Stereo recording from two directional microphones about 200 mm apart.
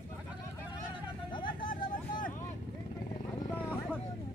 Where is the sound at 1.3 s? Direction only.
25° left (ahead or behind).